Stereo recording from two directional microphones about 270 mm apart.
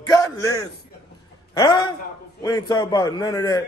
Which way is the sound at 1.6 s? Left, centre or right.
Centre.